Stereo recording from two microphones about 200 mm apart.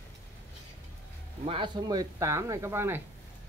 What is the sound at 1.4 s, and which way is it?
Speech, 25° right (ahead or behind).